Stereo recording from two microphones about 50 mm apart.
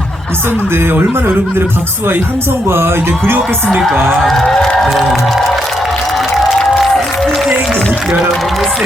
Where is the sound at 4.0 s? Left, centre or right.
Centre.